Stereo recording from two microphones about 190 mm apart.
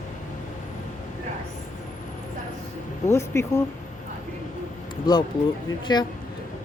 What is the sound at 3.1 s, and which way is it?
Speech, 15° left (ahead or behind).